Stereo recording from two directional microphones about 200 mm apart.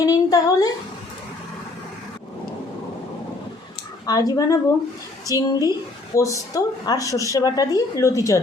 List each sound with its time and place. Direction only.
0.0 s a woman's voice: 15° left (ahead or behind)
4.0 s a woman's voice: 20° left (ahead or behind)